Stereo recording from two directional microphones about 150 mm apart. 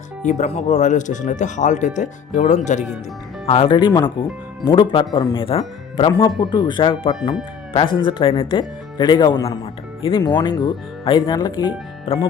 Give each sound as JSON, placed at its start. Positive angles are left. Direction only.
{"t": 0.2, "sound": "speech", "side_deg": 50}
{"t": 3.4, "sound": "speech", "side_deg": 35}